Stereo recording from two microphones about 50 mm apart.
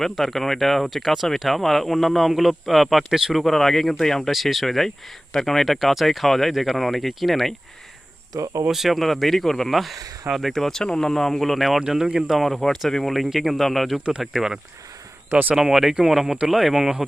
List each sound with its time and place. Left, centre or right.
0.0 s speech: centre
3.4 s speech: centre
8.6 s speech: centre
11.8 s speech: centre
12.3 s speech: centre